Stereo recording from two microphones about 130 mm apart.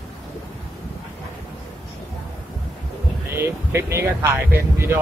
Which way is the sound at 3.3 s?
20° right (ahead or behind).